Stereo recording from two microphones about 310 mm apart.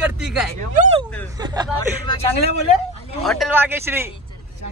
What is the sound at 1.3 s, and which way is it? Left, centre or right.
Speech, centre.